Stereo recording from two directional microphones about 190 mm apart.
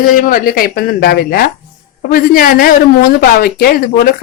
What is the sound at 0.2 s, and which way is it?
Speech, 45° left (ahead or behind).